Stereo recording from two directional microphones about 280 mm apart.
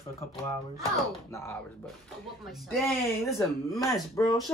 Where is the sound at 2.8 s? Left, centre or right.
Centre.